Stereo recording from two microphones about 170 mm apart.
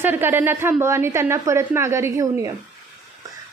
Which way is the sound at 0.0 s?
10° right (ahead or behind).